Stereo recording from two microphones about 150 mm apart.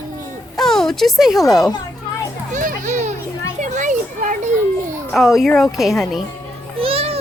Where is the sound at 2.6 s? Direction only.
55° right (ahead or behind).